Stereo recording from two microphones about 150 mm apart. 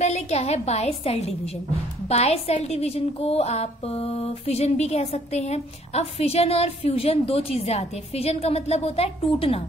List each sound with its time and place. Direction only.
0.0 s a woman's voice: 45° left (ahead or behind)